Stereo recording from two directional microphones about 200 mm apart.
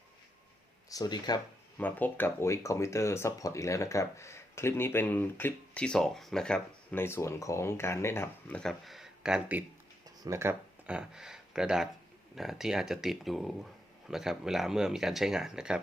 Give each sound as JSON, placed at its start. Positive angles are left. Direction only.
{"t": 0.9, "sound": "speech", "side_deg": 20}
{"t": 1.8, "sound": "speech", "side_deg": 10}